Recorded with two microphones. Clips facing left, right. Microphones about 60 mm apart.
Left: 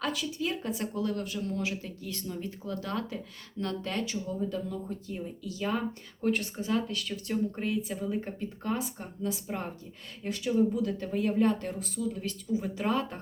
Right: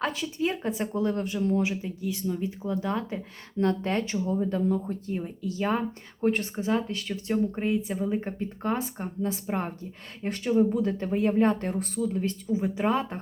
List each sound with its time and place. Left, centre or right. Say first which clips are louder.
0.0 s speech: right 4 dB; right
1.7 s speech: right 6 dB; centre
2.6 s speech: right 5 dB; centre
3.6 s speech: right 7 dB; right
12.1 s speech: right 5 dB; right